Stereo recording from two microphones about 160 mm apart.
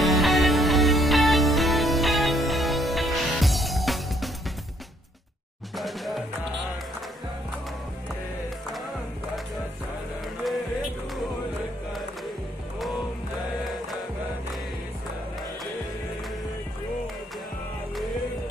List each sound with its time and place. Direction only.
0.0 s music: centre (ahead or behind)
5.8 s music: centre (ahead or behind)